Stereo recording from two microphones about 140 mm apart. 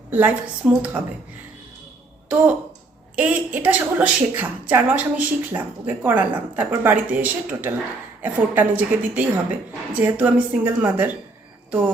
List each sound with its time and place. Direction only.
0.1 s a woman's voice: 10° right (ahead or behind)
3.2 s a woman's voice: 10° right (ahead or behind)